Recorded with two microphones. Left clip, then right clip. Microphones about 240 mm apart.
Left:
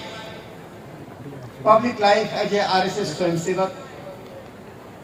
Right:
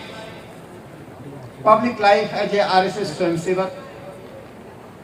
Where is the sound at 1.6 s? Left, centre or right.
Right.